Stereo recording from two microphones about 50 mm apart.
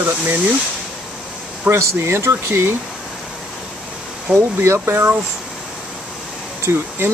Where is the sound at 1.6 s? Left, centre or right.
Right.